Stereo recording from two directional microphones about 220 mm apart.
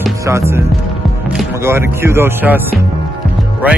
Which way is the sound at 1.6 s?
10° right (ahead or behind).